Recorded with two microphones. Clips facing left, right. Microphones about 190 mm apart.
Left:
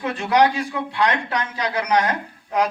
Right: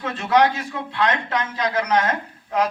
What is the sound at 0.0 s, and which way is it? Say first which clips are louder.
A man's voice: even; 15° left (ahead or behind).